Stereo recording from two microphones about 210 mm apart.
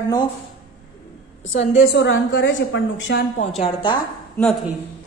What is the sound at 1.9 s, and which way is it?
A woman's voice, 55° left (ahead or behind).